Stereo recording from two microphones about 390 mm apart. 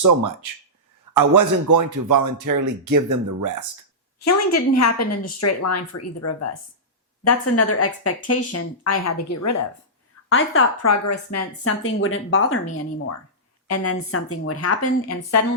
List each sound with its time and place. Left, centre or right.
1.1 s speech: right
4.2 s a woman's voice: left
10.2 s a woman's voice: left
13.7 s a woman's voice: left